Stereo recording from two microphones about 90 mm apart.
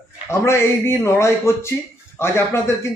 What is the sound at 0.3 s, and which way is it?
A man's voice, 30° left (ahead or behind).